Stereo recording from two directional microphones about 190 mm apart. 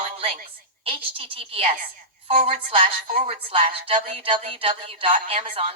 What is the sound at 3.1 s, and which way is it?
Speech, 30° right (ahead or behind).